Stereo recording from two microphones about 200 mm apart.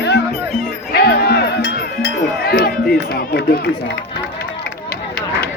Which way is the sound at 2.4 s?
50° left (ahead or behind).